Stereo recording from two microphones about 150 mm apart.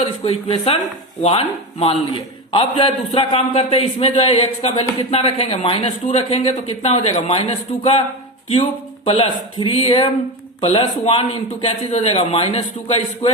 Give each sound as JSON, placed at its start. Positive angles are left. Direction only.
{"t": 0.0, "sound": "a man's voice", "side_deg": 40}
{"t": 9.0, "sound": "a man's voice", "side_deg": 40}